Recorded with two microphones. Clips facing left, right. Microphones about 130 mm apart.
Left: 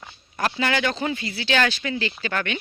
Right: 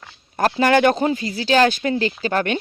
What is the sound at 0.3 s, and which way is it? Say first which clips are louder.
Speech: right 8 dB; 45° right (ahead or behind).